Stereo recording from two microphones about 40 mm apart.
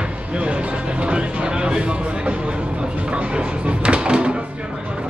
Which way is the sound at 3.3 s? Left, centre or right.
Right.